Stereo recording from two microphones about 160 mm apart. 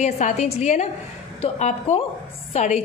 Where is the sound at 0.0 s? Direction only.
45° left (ahead or behind).